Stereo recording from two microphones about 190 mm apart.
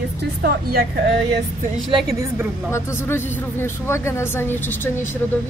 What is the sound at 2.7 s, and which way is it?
Speech, 10° left (ahead or behind).